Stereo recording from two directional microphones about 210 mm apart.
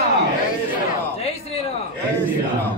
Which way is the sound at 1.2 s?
30° left (ahead or behind).